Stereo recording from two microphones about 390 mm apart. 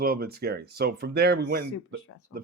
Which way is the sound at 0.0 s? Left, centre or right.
Right.